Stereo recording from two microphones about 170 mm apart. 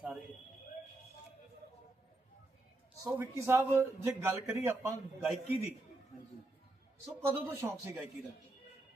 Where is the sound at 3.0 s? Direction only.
15° right (ahead or behind).